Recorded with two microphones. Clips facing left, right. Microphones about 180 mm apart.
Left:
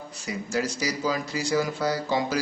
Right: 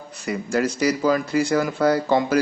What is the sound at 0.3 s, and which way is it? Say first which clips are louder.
Speech: right 6 dB; 60° right (ahead or behind).